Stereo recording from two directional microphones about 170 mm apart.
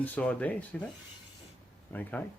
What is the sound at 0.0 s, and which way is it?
Speech, 10° left (ahead or behind).